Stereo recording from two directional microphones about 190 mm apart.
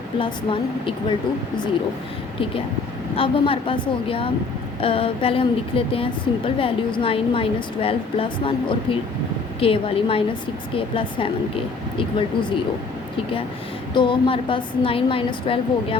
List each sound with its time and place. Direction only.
3.2 s a woman's voice: 30° left (ahead or behind)
13.9 s a woman's voice: 25° left (ahead or behind)